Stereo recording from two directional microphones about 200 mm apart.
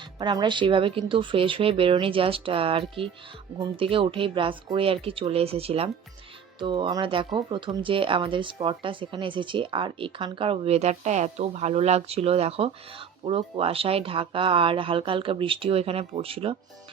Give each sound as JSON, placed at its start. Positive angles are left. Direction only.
{"t": 0.2, "sound": "speech", "side_deg": -20}